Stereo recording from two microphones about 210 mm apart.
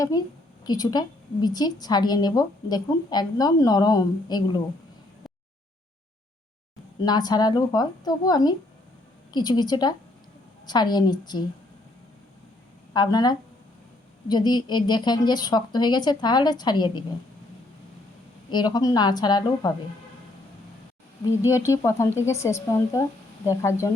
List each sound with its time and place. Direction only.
0.6 s a woman's voice: 20° left (ahead or behind)
7.0 s a woman's voice: 20° left (ahead or behind)
12.9 s a woman's voice: 20° left (ahead or behind)
18.5 s a woman's voice: 20° left (ahead or behind)
21.2 s speech: 15° left (ahead or behind)